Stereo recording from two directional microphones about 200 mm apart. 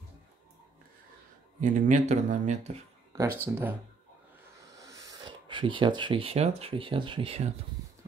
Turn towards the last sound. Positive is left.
turn(degrees=-30)  # may be behind; listen again after turning